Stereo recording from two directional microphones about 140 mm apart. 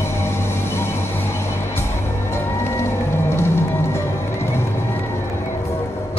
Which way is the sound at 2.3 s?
20° left (ahead or behind).